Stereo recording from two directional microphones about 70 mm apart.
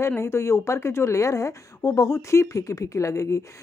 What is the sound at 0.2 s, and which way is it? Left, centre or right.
A woman's voice, left.